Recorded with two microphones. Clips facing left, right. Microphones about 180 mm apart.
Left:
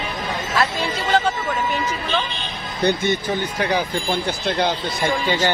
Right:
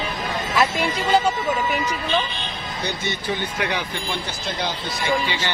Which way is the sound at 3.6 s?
35° left (ahead or behind).